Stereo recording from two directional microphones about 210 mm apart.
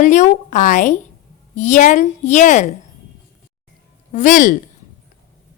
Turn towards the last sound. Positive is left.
turn(degrees=40)  # may be behind; listen again after turning